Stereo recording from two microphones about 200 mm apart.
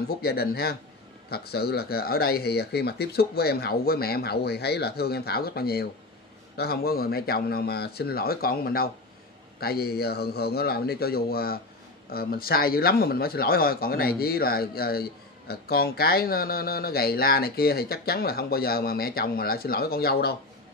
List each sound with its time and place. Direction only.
0.2 s speech: 50° left (ahead or behind)